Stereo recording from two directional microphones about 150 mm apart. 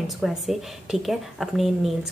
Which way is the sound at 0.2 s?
Centre (ahead or behind).